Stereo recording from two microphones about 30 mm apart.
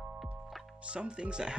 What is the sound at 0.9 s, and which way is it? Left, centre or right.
Speech, right.